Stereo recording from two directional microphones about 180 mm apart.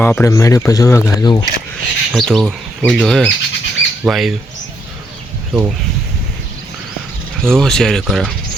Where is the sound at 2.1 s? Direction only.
Centre (ahead or behind).